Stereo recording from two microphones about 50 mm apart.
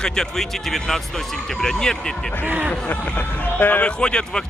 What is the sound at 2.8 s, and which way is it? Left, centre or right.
Speech, left.